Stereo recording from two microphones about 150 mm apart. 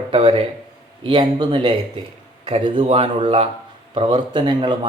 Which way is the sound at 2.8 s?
40° right (ahead or behind).